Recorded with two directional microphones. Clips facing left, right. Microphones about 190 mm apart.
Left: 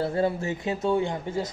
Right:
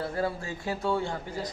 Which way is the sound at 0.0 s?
25° left (ahead or behind).